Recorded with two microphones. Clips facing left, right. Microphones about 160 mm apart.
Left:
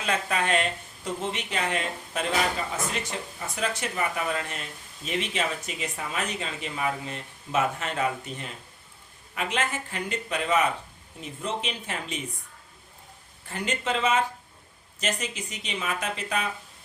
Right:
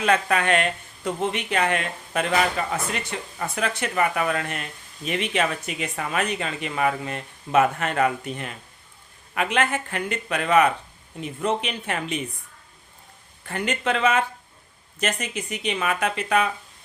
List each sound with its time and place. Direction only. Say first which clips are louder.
0.0 s speech: right 6 dB; 65° right (ahead or behind)
13.4 s speech: right 4 dB; 65° right (ahead or behind)